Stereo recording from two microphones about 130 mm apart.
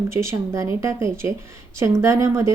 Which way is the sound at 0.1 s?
20° right (ahead or behind).